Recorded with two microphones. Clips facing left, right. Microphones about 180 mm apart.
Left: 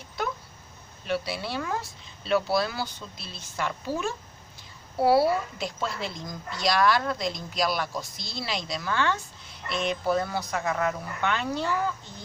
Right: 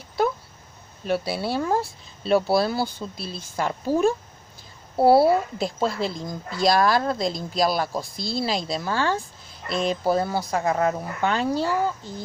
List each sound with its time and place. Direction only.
1.0 s speech: 40° right (ahead or behind)